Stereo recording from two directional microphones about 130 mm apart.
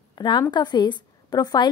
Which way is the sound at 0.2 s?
35° left (ahead or behind).